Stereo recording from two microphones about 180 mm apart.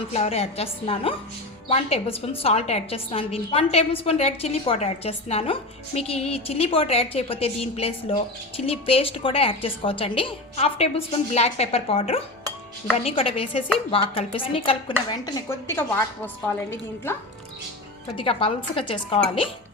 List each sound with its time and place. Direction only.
0.1 s a woman's voice: 35° left (ahead or behind)
15.1 s a woman's voice: 20° left (ahead or behind)
18.2 s a woman's voice: 30° left (ahead or behind)